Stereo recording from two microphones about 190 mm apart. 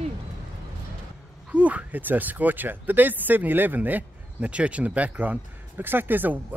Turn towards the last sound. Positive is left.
turn(degrees=-10)  # may be behind; listen again after turning